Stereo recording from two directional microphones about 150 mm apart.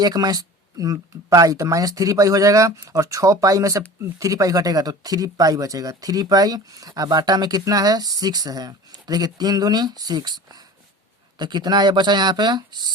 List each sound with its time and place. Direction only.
0.0 s speech: 25° right (ahead or behind)